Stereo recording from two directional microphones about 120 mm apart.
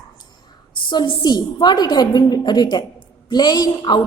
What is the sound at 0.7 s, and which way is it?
A woman's voice, 40° left (ahead or behind).